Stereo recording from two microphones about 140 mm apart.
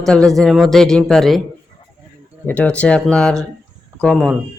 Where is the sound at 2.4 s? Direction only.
10° left (ahead or behind).